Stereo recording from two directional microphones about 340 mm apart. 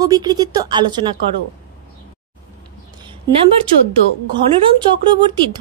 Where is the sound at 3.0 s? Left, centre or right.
Centre.